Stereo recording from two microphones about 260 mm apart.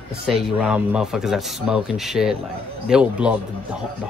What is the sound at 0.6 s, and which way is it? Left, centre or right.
Speech, centre.